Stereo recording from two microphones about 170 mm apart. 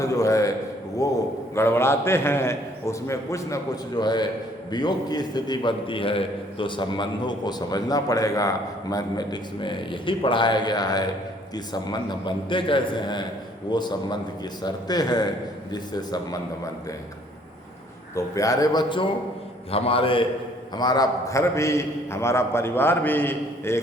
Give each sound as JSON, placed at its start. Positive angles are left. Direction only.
{"t": 0.0, "sound": "a man's voice", "side_deg": 20}
{"t": 18.1, "sound": "a man's voice", "side_deg": 20}